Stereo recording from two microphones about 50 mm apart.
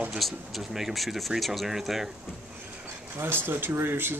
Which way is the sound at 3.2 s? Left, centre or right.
Right.